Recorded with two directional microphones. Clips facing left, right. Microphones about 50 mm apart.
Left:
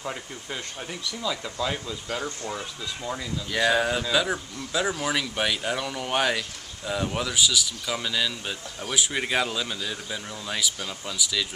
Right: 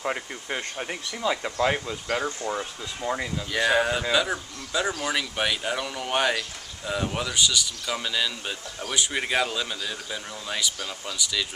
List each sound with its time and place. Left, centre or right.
0.0 s speech: right
2.2 s speech: centre
2.6 s speech: right
3.4 s speech: centre